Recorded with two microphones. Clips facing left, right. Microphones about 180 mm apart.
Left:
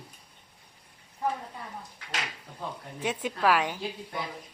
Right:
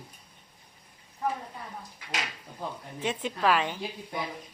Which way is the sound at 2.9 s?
10° left (ahead or behind).